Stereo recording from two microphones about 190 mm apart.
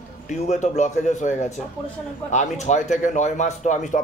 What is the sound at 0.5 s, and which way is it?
Speech, 40° left (ahead or behind).